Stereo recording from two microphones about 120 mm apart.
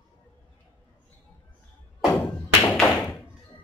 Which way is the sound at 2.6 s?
10° left (ahead or behind).